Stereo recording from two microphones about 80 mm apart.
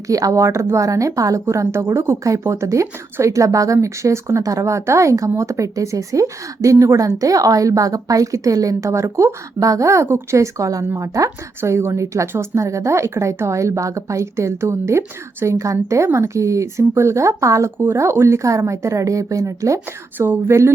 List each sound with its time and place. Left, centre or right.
0.1 s a woman's voice: right
20.1 s speech: right